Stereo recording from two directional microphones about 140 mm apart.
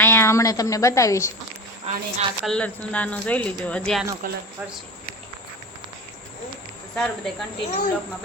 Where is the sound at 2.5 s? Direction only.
10° left (ahead or behind).